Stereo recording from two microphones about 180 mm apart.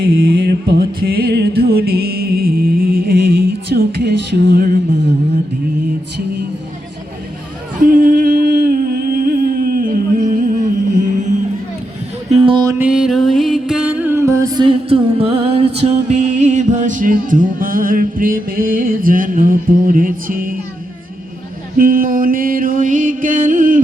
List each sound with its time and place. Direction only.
0.0 s music: 55° right (ahead or behind)
7.8 s humming: 50° right (ahead or behind)
12.3 s music: 30° right (ahead or behind)
12.8 s music: 5° right (ahead or behind); by 20.6 s 50° right (ahead or behind)
21.8 s mantra: 50° right (ahead or behind)